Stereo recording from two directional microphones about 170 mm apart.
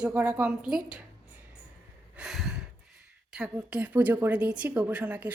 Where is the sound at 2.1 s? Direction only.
5° right (ahead or behind).